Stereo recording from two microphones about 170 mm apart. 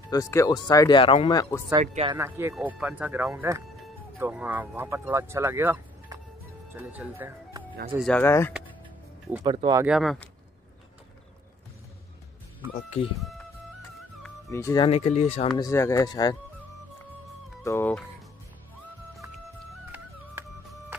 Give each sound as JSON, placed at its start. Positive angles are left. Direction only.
{"t": 0.1, "sound": "speech", "side_deg": 20}
{"t": 1.8, "sound": "speech", "side_deg": -35}
{"t": 2.1, "sound": "speech", "side_deg": -15}
{"t": 8.1, "sound": "speech", "side_deg": 15}
{"t": 9.4, "sound": "speech", "side_deg": -25}
{"t": 9.8, "sound": "speech", "side_deg": 0}
{"t": 14.5, "sound": "speech", "side_deg": 20}
{"t": 14.9, "sound": "speech", "side_deg": 40}
{"t": 15.4, "sound": "speech", "side_deg": 30}
{"t": 15.7, "sound": "speech", "side_deg": 15}
{"t": 17.6, "sound": "speech", "side_deg": 10}